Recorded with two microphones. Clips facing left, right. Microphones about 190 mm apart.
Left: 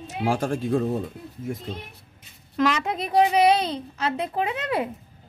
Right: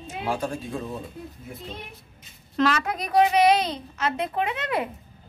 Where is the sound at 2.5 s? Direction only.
15° left (ahead or behind).